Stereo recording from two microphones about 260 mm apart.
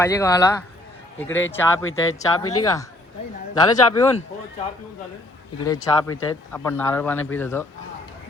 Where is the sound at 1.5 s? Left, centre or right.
Centre.